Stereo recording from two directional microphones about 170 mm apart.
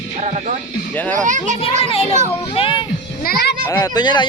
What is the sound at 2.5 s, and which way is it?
Speech, 30° left (ahead or behind).